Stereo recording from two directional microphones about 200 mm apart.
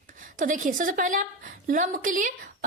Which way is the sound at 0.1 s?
40° right (ahead or behind).